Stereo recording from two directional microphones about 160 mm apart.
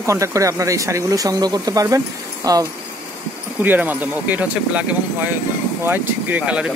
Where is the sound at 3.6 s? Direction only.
10° right (ahead or behind).